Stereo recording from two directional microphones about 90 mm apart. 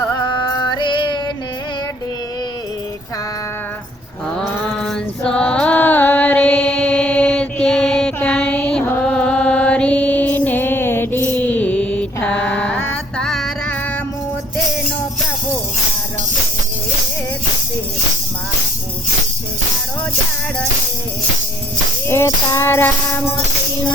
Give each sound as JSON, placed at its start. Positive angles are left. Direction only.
{"t": 0.7, "sound": "music", "side_deg": 55}
{"t": 4.4, "sound": "a sound", "side_deg": 10}
{"t": 9.0, "sound": "mantra", "side_deg": 10}
{"t": 13.2, "sound": "music", "side_deg": 5}
{"t": 22.4, "sound": "music", "side_deg": 30}